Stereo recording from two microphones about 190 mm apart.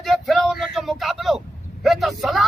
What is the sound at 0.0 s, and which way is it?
Vehicle, centre (ahead or behind).